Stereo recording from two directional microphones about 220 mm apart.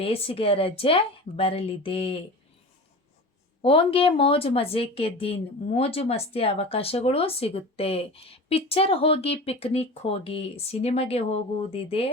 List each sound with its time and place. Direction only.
0.0 s speech: 25° left (ahead or behind)
3.6 s speech: 25° left (ahead or behind)